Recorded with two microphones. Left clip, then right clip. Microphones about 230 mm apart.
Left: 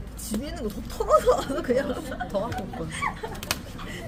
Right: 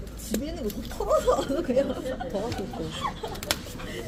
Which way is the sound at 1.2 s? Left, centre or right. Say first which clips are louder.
Left 2 dB; left.